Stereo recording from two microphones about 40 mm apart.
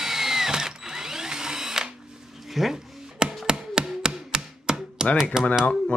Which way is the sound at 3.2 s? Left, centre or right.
Right.